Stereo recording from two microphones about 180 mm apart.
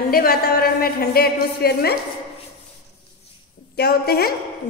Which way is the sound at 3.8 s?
60° left (ahead or behind).